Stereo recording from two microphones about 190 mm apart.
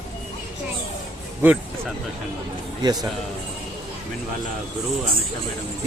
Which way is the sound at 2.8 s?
20° right (ahead or behind).